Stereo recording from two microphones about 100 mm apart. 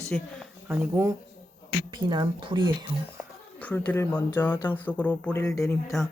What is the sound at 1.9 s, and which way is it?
Speech, 45° right (ahead or behind).